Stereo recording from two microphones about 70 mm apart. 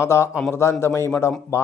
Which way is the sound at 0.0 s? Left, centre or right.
Left.